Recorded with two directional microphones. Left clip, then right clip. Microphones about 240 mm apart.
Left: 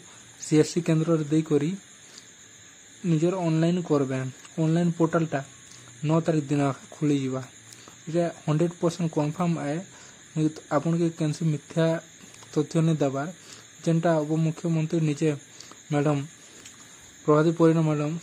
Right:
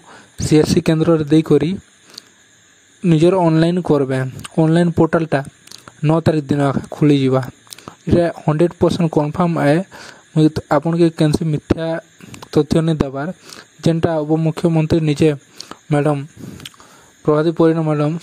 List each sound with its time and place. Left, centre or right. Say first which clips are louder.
0.4 s speech: right 9 dB; right